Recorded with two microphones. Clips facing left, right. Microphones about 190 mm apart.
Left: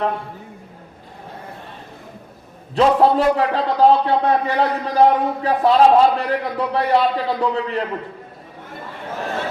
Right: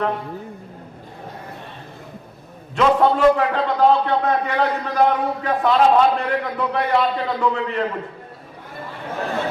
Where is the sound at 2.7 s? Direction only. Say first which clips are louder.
Left 2 dB; 30° left (ahead or behind).